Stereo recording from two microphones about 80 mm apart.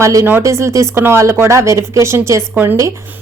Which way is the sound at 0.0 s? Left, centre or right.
Right.